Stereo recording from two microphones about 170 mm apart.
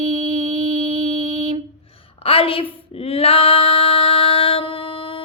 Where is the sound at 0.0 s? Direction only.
45° right (ahead or behind).